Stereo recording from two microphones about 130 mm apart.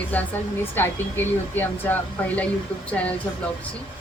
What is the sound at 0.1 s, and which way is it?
Speech, 10° left (ahead or behind).